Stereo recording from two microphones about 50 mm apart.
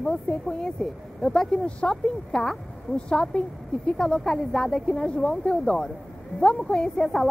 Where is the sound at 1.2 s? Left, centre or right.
Centre.